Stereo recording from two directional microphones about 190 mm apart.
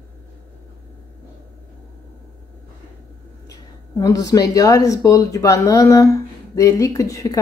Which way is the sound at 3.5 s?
20° left (ahead or behind).